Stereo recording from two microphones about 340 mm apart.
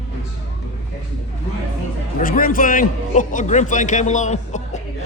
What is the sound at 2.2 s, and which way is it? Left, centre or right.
A man's voice, left.